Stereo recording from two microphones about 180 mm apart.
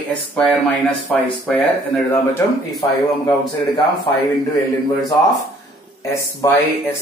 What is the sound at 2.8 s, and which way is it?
Speech, 20° left (ahead or behind).